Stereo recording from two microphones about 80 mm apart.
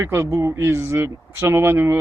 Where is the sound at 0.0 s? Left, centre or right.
Right.